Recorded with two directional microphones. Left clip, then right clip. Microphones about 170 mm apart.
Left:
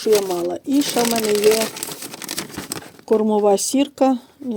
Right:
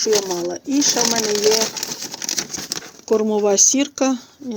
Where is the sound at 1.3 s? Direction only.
60° left (ahead or behind).